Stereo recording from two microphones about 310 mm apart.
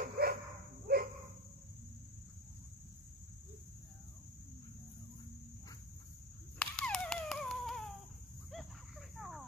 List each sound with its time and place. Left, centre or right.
0.0 s dog: right
6.6 s a sound: centre
9.2 s cricket: centre